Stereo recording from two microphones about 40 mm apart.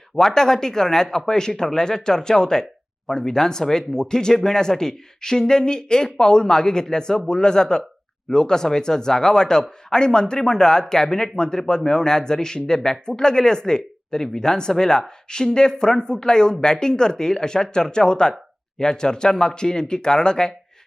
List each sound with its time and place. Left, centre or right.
0.2 s speech: centre